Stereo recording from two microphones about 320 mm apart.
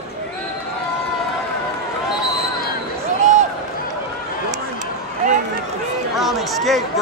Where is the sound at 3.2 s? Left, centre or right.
Right.